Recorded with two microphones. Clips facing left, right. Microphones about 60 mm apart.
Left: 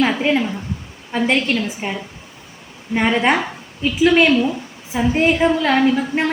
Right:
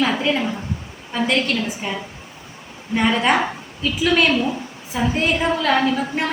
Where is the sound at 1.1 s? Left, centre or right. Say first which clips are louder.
Left 2 dB; left.